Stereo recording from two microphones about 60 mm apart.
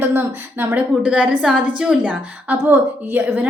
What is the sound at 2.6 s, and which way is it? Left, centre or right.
Speech, right.